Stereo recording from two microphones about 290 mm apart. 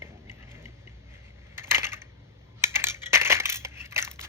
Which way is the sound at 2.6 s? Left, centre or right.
Centre.